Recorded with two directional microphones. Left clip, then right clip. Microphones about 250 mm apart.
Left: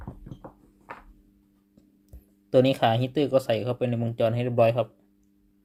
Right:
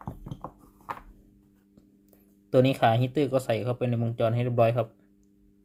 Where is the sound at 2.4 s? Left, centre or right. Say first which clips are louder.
Left 1 dB; centre.